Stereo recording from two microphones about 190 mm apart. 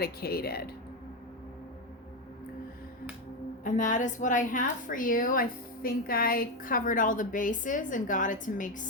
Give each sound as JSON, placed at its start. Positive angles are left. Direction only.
{"t": 0.0, "sound": "speech", "side_deg": 55}
{"t": 3.6, "sound": "a woman's voice", "side_deg": 40}